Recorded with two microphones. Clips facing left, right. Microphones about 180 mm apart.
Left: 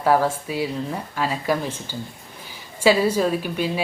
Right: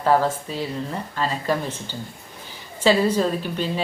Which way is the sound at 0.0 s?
10° left (ahead or behind).